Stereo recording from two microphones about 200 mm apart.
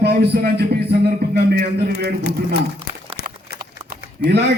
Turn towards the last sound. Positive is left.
turn(degrees=-50)  # may be behind; listen again after turning